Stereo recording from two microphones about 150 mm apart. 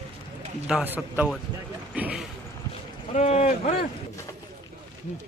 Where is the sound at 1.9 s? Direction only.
10° right (ahead or behind).